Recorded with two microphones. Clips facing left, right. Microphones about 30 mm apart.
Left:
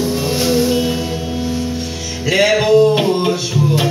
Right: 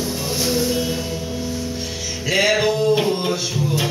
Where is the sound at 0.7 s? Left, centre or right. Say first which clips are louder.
Left 5 dB; left.